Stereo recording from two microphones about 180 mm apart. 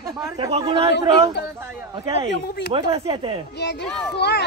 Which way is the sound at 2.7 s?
30° right (ahead or behind).